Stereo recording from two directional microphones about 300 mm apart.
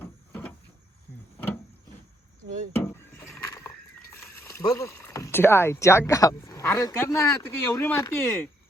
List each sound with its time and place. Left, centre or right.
0.0 s cupboard open or close: centre
2.7 s a sound: centre
4.4 s speech: centre